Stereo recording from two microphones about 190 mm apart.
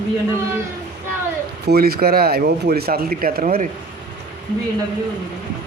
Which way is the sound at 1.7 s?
55° right (ahead or behind).